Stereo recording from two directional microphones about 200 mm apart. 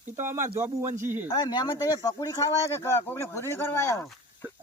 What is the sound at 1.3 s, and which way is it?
Speech, 20° left (ahead or behind).